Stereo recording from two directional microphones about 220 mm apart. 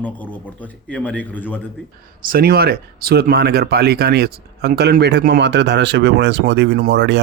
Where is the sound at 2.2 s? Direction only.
40° right (ahead or behind).